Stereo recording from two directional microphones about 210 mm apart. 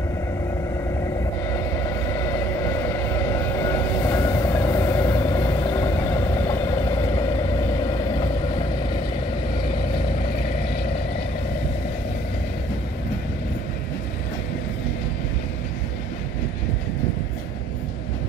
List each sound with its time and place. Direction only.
1.8 s vehicle: 15° left (ahead or behind)